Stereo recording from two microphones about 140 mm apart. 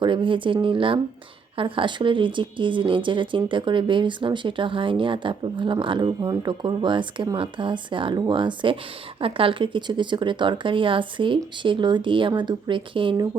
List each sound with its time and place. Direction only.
0.0 s speech: 35° right (ahead or behind)